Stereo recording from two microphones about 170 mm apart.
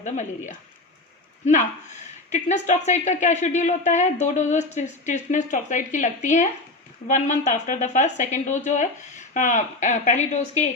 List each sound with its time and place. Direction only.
0.0 s speech: 45° left (ahead or behind)
2.3 s speech: 45° left (ahead or behind)